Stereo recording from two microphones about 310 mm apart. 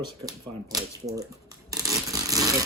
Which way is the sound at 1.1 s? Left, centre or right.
Centre.